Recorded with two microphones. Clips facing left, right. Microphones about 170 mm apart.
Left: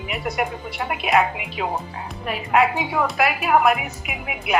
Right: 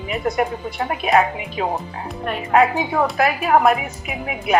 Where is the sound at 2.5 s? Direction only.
35° right (ahead or behind).